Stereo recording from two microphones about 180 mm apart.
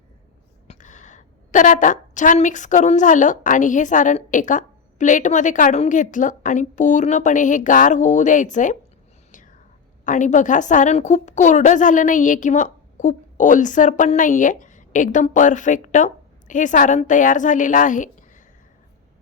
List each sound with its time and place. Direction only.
0.7 s a woman's voice: 45° left (ahead or behind)
10.1 s a woman's voice: 45° left (ahead or behind)